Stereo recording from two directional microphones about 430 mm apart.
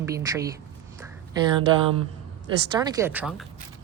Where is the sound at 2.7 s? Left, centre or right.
Centre.